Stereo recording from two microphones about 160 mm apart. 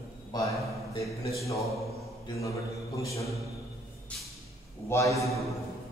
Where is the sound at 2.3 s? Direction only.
20° left (ahead or behind).